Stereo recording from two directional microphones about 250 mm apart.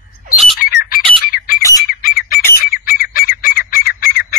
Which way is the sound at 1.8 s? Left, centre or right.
Left.